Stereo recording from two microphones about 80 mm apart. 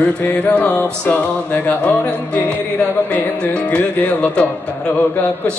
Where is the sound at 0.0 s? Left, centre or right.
Left.